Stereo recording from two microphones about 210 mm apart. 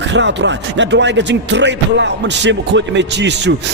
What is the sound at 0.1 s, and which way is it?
Speech, 55° right (ahead or behind).